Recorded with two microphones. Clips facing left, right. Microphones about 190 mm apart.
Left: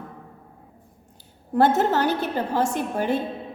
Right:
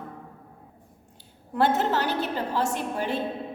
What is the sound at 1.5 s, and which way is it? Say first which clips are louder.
A woman's voice: left 4 dB; 45° left (ahead or behind).